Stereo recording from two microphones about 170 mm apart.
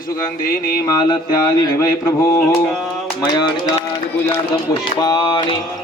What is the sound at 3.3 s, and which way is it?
Speech, 25° left (ahead or behind).